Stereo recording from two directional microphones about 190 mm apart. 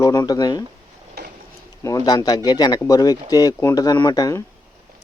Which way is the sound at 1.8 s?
20° left (ahead or behind).